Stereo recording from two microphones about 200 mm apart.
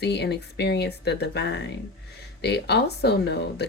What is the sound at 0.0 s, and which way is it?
Speech, 55° left (ahead or behind).